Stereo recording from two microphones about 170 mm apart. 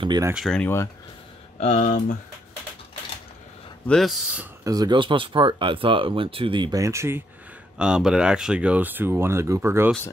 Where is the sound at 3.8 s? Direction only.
Centre (ahead or behind).